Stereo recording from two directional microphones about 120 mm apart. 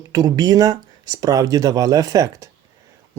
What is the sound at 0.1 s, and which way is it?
Speech, 35° right (ahead or behind).